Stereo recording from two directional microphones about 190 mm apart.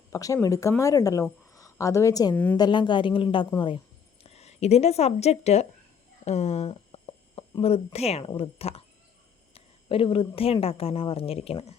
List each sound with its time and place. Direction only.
0.1 s a woman's voice: 20° left (ahead or behind)
2.6 s a woman's voice: 25° left (ahead or behind)